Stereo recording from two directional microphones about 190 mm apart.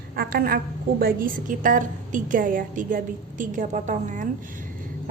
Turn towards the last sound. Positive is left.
turn(degrees=-40)  # may be behind; listen again after turning